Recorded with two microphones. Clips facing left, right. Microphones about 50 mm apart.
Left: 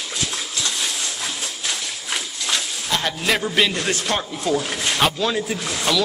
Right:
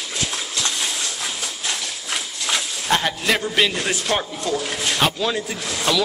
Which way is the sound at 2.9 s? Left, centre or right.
Right.